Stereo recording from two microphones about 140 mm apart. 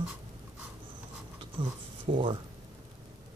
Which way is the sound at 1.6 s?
35° right (ahead or behind).